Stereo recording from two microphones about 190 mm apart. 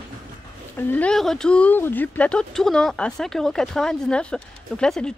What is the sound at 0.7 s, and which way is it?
Speech, 10° left (ahead or behind).